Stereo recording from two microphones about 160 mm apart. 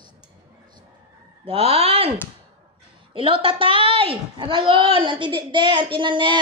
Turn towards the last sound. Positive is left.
turn(degrees=-30)  # may be behind; listen again after turning